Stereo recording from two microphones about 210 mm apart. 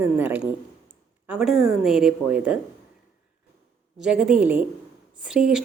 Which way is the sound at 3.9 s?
5° right (ahead or behind).